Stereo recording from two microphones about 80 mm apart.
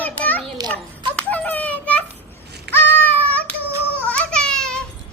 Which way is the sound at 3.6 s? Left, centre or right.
Right.